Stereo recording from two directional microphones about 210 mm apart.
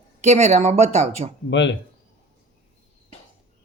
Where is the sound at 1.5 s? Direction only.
60° left (ahead or behind).